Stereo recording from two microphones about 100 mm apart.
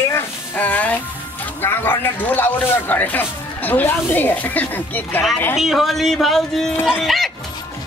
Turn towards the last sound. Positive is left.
turn(degrees=0)  # may be behind; listen again after turning